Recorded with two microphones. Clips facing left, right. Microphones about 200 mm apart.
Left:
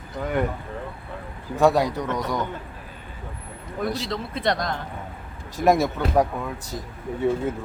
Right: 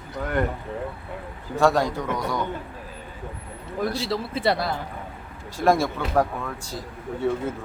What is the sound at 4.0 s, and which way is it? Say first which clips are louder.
Speech: right 2 dB; 5° right (ahead or behind).